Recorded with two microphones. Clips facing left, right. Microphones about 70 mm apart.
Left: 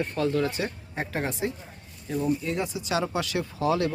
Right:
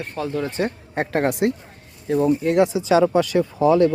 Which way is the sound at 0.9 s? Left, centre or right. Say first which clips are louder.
Right 11 dB; right.